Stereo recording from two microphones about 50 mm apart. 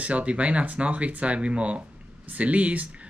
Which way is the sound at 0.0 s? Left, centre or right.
Right.